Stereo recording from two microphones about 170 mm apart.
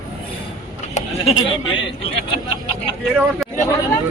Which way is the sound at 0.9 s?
35° left (ahead or behind).